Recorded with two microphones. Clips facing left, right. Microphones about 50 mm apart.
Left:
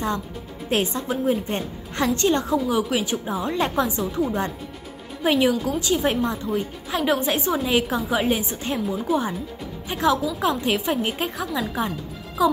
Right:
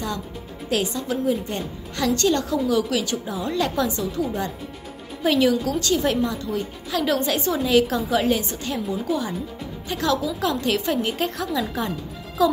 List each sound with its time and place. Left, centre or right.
0.7 s a woman's voice: left
5.2 s a woman's voice: centre